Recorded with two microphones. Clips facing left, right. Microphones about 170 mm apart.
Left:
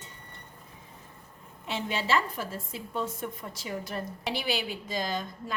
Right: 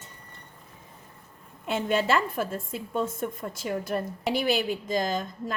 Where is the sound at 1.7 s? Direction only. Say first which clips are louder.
Right 4 dB; 50° right (ahead or behind).